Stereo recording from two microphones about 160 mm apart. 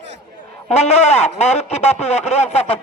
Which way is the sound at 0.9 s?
40° left (ahead or behind).